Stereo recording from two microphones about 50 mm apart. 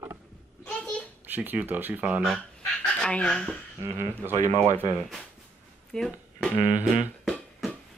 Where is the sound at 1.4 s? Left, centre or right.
Right.